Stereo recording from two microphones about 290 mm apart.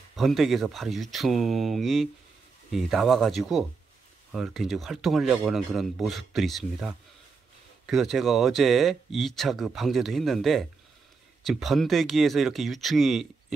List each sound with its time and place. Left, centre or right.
0.1 s speech: centre